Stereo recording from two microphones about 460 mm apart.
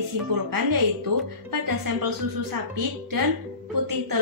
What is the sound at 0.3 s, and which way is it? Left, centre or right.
Speech, right.